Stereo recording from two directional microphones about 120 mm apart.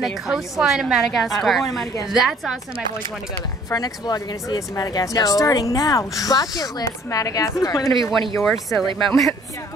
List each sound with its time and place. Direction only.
0.0 s a woman's voice: 5° right (ahead or behind)
3.7 s speech: 35° left (ahead or behind)
8.4 s a woman's voice: centre (ahead or behind)